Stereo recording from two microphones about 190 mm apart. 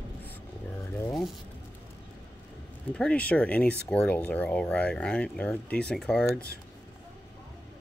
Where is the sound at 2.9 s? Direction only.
5° left (ahead or behind).